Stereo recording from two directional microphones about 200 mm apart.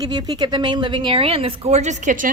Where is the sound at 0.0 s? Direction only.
20° right (ahead or behind).